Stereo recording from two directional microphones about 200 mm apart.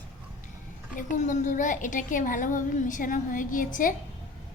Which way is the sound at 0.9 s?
40° left (ahead or behind).